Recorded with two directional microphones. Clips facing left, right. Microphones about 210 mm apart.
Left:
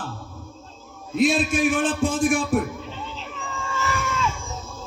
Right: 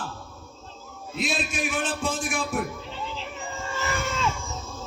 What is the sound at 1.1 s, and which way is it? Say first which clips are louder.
Speech: left 9 dB; 50° left (ahead or behind).